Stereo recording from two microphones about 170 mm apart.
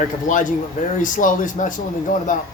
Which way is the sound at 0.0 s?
50° left (ahead or behind).